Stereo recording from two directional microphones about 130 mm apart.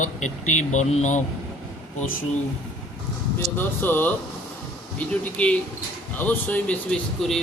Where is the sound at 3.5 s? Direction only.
15° left (ahead or behind).